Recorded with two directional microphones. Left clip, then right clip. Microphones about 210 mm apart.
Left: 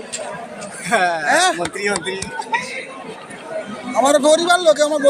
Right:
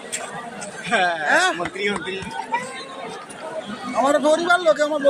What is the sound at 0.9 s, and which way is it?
Speech, 50° left (ahead or behind).